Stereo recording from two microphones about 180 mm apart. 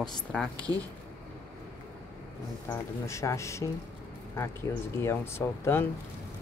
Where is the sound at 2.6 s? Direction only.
15° left (ahead or behind).